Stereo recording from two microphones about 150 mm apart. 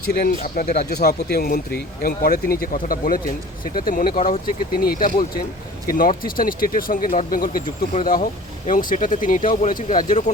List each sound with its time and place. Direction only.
0.1 s speech: 85° left
0.7 s speech: 90° left; by 10.3 s 55° left (ahead or behind)